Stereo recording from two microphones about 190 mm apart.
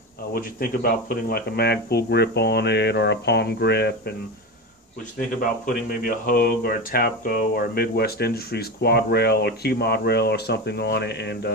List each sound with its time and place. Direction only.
0.3 s speech: 50° left (ahead or behind)
5.7 s speech: 50° left (ahead or behind)